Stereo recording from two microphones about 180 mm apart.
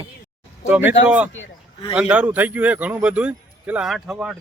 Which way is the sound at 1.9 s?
5° right (ahead or behind).